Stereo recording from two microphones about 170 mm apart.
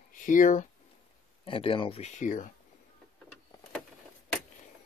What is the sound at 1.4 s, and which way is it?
Speech, 30° left (ahead or behind).